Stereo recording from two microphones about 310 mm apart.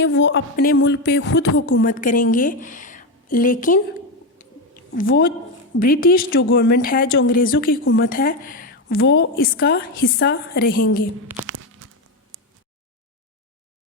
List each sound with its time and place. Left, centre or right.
0.0 s a woman's voice: left
4.9 s a woman's voice: left
11.4 s tearing: right
12.3 s a sound: right